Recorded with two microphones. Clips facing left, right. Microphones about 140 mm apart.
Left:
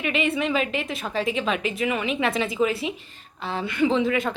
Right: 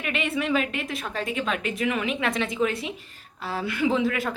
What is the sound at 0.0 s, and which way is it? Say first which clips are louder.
A woman's voice: left 3 dB; centre (ahead or behind).